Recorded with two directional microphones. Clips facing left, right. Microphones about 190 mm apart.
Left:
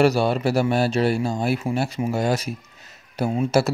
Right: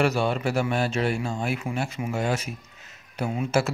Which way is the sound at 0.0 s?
35° left (ahead or behind).